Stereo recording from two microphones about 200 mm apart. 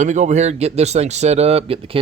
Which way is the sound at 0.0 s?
35° right (ahead or behind).